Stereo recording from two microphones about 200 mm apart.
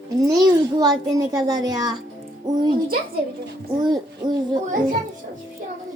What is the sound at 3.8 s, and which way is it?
Speech, 20° right (ahead or behind).